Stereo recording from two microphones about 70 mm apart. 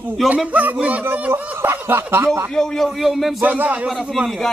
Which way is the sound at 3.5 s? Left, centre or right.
Right.